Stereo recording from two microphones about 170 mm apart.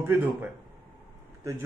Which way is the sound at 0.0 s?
10° right (ahead or behind).